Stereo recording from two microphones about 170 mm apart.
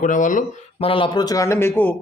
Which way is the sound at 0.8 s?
30° left (ahead or behind).